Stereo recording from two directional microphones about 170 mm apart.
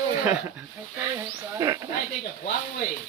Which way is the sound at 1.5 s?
20° right (ahead or behind).